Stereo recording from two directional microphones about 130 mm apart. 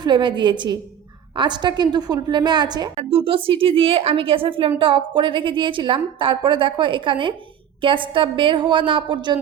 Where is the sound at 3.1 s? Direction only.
45° right (ahead or behind).